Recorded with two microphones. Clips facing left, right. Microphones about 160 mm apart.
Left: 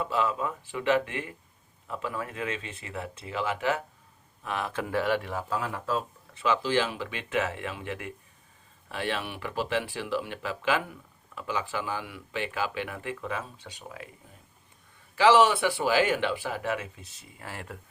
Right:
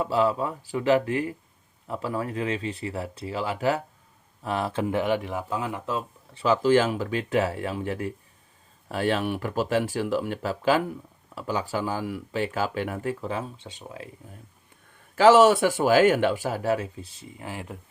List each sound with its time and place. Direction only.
0.0 s speech: 35° right (ahead or behind); by 6.0 s 20° right (ahead or behind)
6.3 s speech: 40° right (ahead or behind)
15.1 s speech: 45° right (ahead or behind)
17.4 s speech: 15° right (ahead or behind)